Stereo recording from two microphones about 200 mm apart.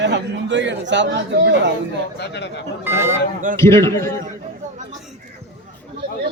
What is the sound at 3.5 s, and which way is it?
Speech, 15° left (ahead or behind).